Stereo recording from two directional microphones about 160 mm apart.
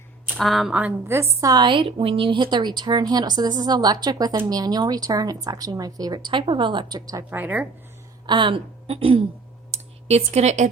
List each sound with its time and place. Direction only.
0.3 s a woman's voice: centre (ahead or behind); by 7.3 s 25° right (ahead or behind)
7.3 s a woman's voice: 10° right (ahead or behind)
8.3 s speech: 30° right (ahead or behind)
9.7 s a sound: 40° right (ahead or behind)